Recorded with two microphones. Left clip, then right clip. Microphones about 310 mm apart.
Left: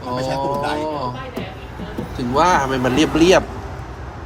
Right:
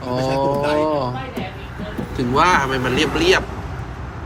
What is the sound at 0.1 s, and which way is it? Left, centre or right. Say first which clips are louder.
Cattle: right 2 dB; centre.